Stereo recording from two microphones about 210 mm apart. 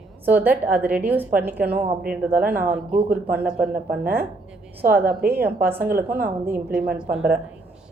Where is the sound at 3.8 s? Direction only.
45° right (ahead or behind).